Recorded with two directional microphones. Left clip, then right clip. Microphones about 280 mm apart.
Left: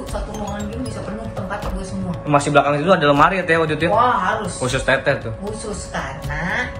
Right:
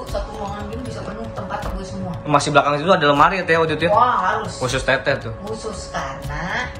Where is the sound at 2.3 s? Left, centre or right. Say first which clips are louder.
Even; centre.